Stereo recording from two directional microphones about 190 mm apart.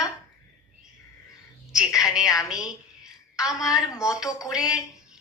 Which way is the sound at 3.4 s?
15° left (ahead or behind).